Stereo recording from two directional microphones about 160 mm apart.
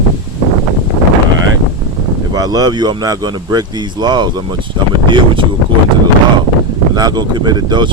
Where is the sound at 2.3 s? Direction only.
25° right (ahead or behind).